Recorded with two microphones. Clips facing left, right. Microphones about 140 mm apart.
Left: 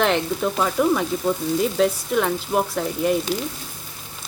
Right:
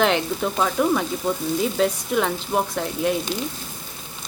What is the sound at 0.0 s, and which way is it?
Speech, centre (ahead or behind).